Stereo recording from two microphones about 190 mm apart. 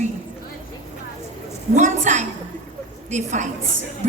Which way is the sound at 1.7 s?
40° right (ahead or behind).